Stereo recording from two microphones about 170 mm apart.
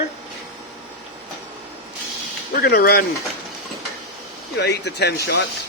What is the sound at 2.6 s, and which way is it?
Speech, 65° left (ahead or behind).